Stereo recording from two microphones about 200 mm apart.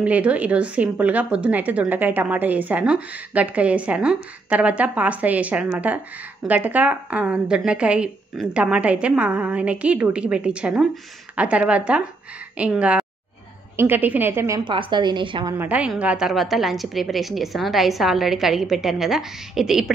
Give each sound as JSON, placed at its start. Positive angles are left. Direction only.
{"t": 0.0, "sound": "a woman's voice", "side_deg": -5}
{"t": 15.5, "sound": "a woman's voice", "side_deg": -10}